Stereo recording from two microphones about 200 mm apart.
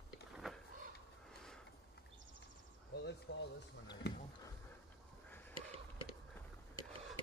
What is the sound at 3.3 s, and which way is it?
Speech, 60° left (ahead or behind).